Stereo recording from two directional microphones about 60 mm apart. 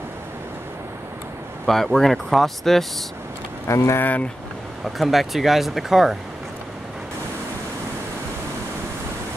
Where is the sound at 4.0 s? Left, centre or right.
Left.